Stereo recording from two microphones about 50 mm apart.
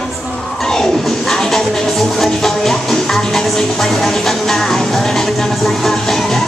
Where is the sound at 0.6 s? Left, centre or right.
Centre.